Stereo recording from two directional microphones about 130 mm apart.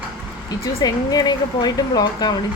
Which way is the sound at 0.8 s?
30° left (ahead or behind).